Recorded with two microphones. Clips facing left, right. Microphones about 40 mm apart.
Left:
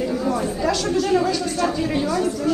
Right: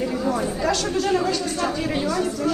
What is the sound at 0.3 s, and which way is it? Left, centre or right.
A woman's voice, centre.